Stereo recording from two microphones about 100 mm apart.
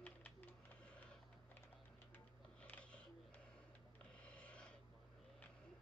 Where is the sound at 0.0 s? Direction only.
15° left (ahead or behind).